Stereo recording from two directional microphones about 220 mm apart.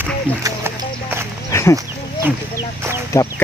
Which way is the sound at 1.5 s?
15° left (ahead or behind).